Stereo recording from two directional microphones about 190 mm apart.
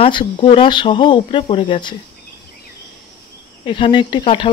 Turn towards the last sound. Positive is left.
turn(degrees=25)  # may be behind; listen again after turning